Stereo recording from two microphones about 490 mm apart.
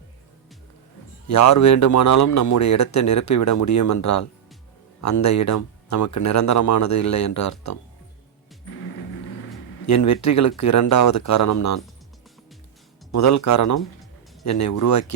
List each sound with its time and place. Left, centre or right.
1.3 s speech: left
9.8 s speech: left
13.1 s speech: left